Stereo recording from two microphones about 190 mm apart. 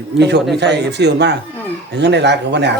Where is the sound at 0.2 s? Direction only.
65° right (ahead or behind).